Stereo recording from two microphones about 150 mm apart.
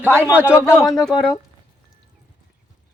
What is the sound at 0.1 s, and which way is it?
Speech, 10° left (ahead or behind).